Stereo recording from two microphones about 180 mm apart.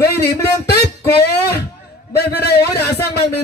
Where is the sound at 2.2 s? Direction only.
60° left (ahead or behind).